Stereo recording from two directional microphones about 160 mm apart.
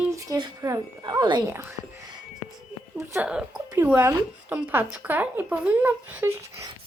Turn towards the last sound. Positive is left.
turn(degrees=-15)  # may be behind; listen again after turning